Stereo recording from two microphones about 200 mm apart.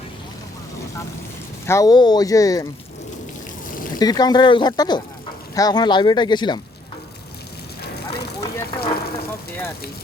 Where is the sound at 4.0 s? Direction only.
20° left (ahead or behind).